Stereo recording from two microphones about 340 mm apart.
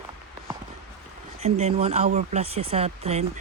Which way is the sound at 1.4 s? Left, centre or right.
Centre.